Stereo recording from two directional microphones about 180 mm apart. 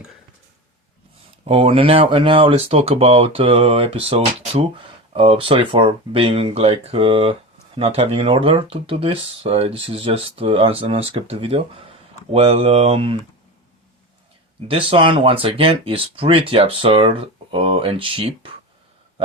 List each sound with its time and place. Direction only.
1.5 s speech: 35° right (ahead or behind)
14.7 s speech: 30° right (ahead or behind)